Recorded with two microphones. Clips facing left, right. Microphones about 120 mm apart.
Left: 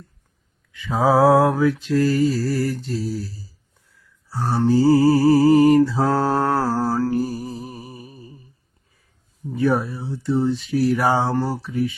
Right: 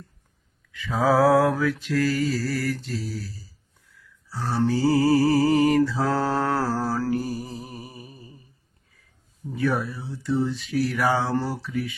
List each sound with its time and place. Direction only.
0.9 s speech: 25° left (ahead or behind)
2.6 s music: 30° left (ahead or behind)
4.4 s mantra: 15° left (ahead or behind)
4.9 s music: 35° left (ahead or behind)
6.1 s mantra: 15° left (ahead or behind)
7.2 s music: 25° left (ahead or behind)
9.6 s speech: 30° left (ahead or behind)